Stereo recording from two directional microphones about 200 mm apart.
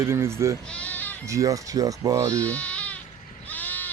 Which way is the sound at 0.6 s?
5° left (ahead or behind).